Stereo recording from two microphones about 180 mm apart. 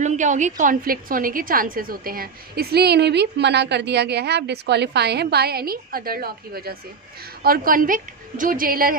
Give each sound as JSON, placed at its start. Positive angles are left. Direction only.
{"t": 0.0, "sound": "a woman's voice", "side_deg": -45}